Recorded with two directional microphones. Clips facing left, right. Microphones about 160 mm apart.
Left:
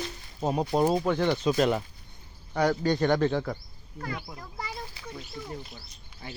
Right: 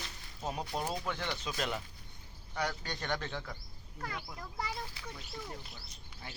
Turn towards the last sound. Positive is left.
turn(degrees=15)  # may be behind; listen again after turning